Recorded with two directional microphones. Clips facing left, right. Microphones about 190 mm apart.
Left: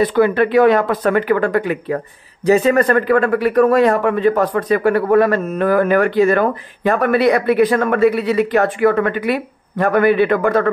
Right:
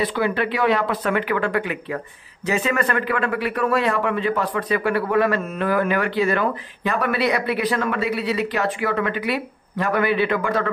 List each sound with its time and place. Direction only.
0.0 s speech: 50° left (ahead or behind)